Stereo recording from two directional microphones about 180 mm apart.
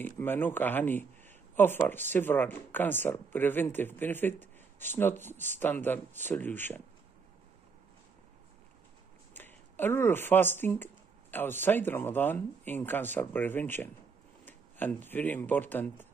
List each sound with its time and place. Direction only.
0.0 s speech: 10° left (ahead or behind)
9.3 s speech: 10° left (ahead or behind)